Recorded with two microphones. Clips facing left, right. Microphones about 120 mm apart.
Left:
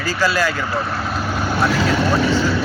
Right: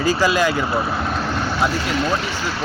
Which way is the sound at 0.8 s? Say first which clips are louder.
Right 1 dB; centre (ahead or behind).